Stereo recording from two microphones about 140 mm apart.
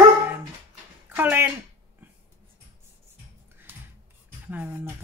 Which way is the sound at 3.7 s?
15° right (ahead or behind).